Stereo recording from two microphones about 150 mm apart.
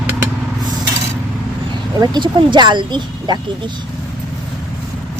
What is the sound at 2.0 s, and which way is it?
Speech, 30° right (ahead or behind).